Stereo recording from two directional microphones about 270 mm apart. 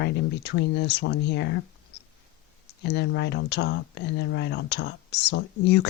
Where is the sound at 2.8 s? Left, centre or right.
Left.